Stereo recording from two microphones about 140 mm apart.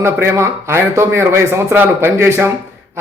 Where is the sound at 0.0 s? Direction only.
20° right (ahead or behind).